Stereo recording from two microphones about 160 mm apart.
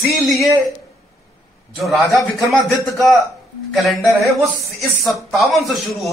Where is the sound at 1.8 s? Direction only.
Centre (ahead or behind).